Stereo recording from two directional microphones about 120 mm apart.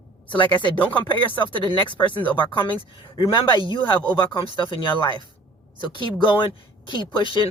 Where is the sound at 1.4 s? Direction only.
40° left (ahead or behind).